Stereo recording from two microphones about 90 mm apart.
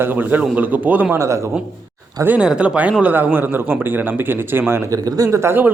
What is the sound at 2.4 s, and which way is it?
A man's voice, 10° right (ahead or behind).